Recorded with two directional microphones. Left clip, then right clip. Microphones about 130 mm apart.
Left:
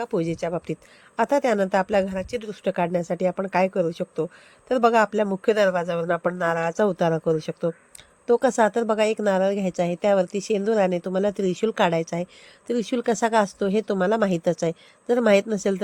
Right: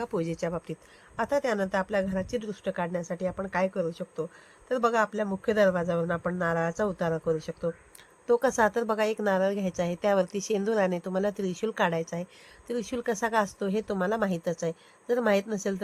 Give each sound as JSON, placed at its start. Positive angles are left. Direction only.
{"t": 0.0, "sound": "speech", "side_deg": 25}
{"t": 1.1, "sound": "a woman's voice", "side_deg": 40}